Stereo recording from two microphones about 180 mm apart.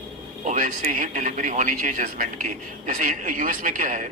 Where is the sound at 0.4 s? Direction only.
45° right (ahead or behind).